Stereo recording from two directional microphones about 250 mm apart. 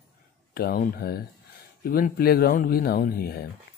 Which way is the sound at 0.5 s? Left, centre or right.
Left.